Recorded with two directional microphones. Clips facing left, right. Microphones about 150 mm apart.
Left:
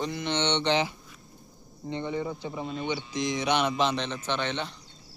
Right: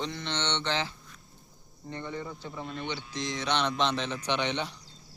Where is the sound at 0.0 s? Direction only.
10° left (ahead or behind).